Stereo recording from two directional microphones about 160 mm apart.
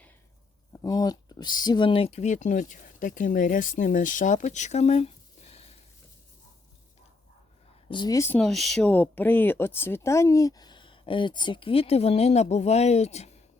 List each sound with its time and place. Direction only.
0.7 s speech: 20° left (ahead or behind); by 5.7 s 40° left (ahead or behind)
7.9 s speech: 25° left (ahead or behind)
8.4 s speech: centre (ahead or behind); by 13.4 s 45° left (ahead or behind)